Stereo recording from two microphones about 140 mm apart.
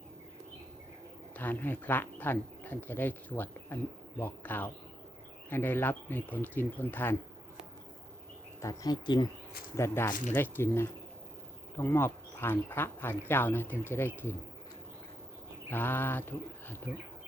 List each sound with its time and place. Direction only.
1.4 s speech: 10° left (ahead or behind)
8.6 s speech: 25° left (ahead or behind)
9.7 s speech: 20° left (ahead or behind)
15.7 s speech: 15° left (ahead or behind)